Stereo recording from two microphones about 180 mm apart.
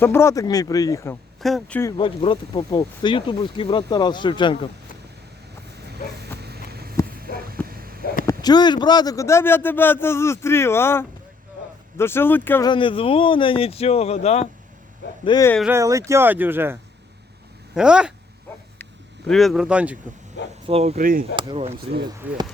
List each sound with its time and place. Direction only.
0.0 s speech: 15° left (ahead or behind)
1.4 s speech: centre (ahead or behind)
2.0 s speech: 30° left (ahead or behind)
6.1 s a sound: 65° right (ahead or behind)
8.3 s speech: 20° left (ahead or behind)
12.6 s speech: 30° left (ahead or behind)
15.2 s speech: 25° left (ahead or behind)
15.6 s speech: 15° right (ahead or behind)
17.7 s speech: 5° right (ahead or behind)
19.3 s speech: centre (ahead or behind)
20.7 s speech: 35° right (ahead or behind)
21.0 s speech: 50° right (ahead or behind)
21.3 s speech: 30° right (ahead or behind)
22.0 s speech: 15° right (ahead or behind)